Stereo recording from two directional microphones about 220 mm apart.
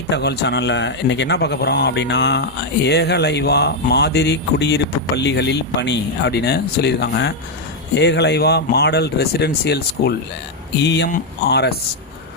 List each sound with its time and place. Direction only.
0.1 s speech: 50° left (ahead or behind)